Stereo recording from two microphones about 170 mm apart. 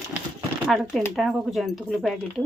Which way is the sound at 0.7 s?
Centre (ahead or behind).